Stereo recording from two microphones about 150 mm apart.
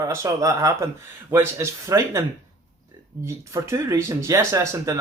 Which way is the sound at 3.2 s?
20° right (ahead or behind).